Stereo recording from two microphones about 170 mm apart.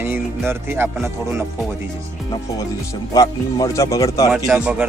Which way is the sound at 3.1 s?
20° left (ahead or behind).